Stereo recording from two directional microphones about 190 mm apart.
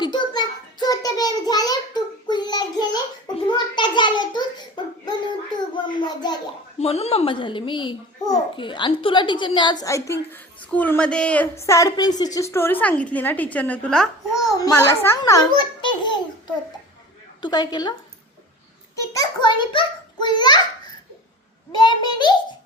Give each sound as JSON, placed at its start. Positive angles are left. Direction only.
{"t": 0.0, "sound": "a sound", "side_deg": 25}
{"t": 6.7, "sound": "a child's voice", "side_deg": 35}
{"t": 14.6, "sound": "a child's voice", "side_deg": 15}
{"t": 17.4, "sound": "a child's voice", "side_deg": 20}
{"t": 19.1, "sound": "a child's voice", "side_deg": 20}
{"t": 21.8, "sound": "a child's voice", "side_deg": 25}